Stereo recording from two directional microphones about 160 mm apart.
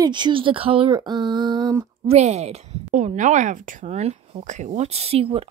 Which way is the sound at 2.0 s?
40° right (ahead or behind).